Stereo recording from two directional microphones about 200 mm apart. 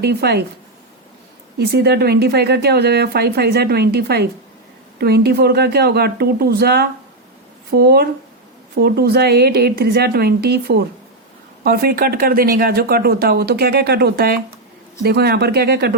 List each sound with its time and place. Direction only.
0.0 s speech: 55° right (ahead or behind)
1.7 s speech: 55° right (ahead or behind)